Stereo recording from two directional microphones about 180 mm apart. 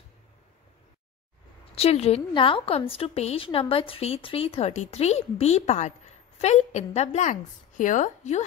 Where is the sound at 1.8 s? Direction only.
35° left (ahead or behind).